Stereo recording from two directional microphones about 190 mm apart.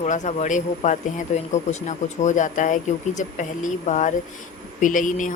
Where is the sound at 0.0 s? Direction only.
35° left (ahead or behind).